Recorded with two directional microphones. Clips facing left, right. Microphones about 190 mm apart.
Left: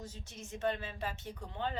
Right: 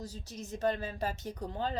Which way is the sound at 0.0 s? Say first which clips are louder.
Right 5 dB; 35° right (ahead or behind).